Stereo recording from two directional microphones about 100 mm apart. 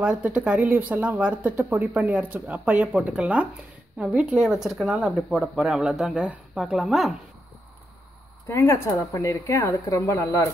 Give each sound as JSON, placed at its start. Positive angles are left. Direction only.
{"t": 0.0, "sound": "speech", "side_deg": -10}
{"t": 8.5, "sound": "speech", "side_deg": 25}